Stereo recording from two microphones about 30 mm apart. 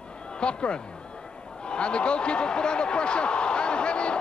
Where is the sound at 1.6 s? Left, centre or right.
Left.